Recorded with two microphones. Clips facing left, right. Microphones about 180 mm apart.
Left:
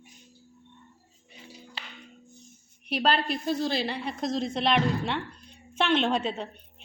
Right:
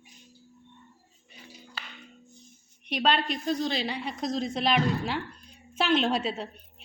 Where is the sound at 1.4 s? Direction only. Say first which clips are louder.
Left 1 dB; 25° left (ahead or behind).